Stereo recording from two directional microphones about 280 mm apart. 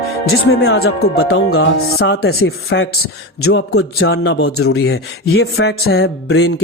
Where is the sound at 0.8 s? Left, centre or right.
Left.